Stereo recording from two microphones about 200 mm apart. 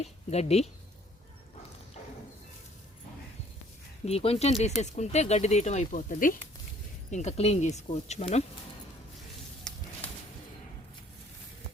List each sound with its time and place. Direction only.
0.0 s a woman's voice: 30° left (ahead or behind)
4.0 s speech: 30° left (ahead or behind)
9.7 s a sound: 5° left (ahead or behind)